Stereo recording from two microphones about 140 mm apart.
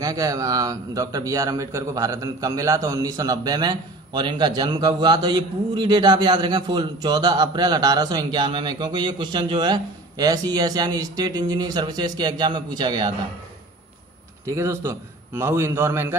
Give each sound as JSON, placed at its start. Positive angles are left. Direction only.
{"t": 0.0, "sound": "a man's voice", "side_deg": -25}
{"t": 14.4, "sound": "a man's voice", "side_deg": -20}